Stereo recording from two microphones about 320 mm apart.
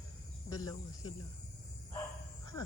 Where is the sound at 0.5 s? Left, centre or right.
Centre.